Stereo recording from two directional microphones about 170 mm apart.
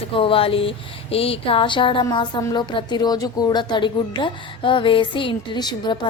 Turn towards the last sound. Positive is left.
turn(degrees=25)  # may be behind; listen again after turning